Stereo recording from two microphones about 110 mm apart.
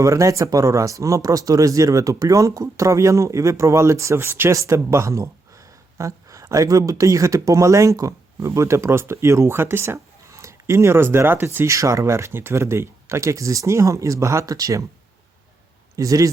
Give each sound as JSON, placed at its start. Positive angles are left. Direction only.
{"t": 0.0, "sound": "speech", "side_deg": -30}
{"t": 16.0, "sound": "speech", "side_deg": -30}